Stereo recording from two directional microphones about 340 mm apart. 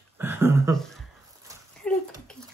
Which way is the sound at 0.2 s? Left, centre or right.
Centre.